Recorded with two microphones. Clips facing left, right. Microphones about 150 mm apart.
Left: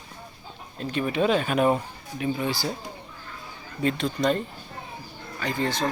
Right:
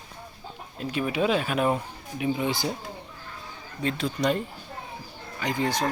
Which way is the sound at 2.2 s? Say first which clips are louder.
Right 1 dB; 15° right (ahead or behind).